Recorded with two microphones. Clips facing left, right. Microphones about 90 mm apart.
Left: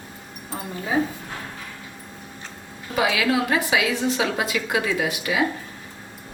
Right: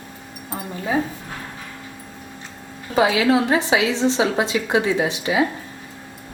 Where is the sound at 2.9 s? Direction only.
25° right (ahead or behind).